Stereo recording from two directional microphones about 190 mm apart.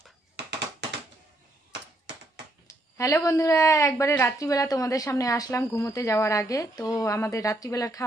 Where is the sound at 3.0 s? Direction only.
15° left (ahead or behind).